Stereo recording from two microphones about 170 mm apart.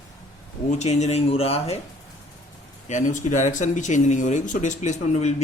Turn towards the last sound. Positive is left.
turn(degrees=40)  # may be behind; listen again after turning